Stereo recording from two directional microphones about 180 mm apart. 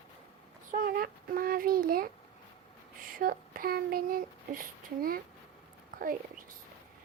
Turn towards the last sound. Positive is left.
turn(degrees=-50)  # may be behind; listen again after turning